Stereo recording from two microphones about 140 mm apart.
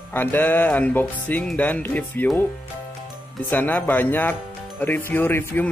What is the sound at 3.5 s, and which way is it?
Speech, 15° left (ahead or behind).